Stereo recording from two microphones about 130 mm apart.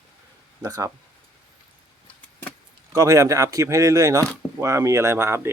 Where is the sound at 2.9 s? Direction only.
25° right (ahead or behind).